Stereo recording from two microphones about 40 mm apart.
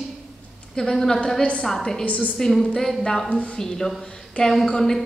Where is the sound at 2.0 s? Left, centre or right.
Left.